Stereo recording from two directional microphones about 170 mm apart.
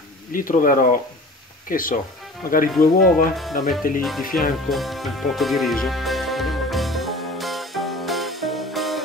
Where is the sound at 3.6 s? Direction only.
55° left (ahead or behind).